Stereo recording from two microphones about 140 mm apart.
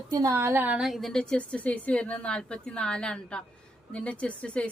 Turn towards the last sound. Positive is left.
turn(degrees=10)  # may be behind; listen again after turning